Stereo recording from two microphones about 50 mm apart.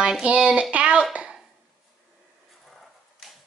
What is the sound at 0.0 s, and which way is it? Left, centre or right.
Speech, centre.